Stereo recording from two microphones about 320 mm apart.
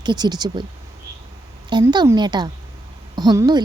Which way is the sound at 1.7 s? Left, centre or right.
Centre.